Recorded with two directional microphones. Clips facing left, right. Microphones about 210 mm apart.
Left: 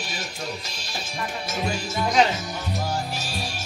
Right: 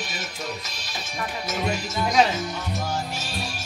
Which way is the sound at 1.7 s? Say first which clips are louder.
Right 1 dB; 30° left (ahead or behind).